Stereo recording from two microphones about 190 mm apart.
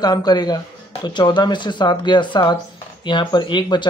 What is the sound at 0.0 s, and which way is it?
Speech, 20° left (ahead or behind).